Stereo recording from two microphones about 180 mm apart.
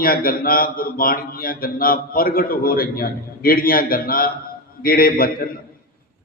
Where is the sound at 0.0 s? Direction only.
55° left (ahead or behind).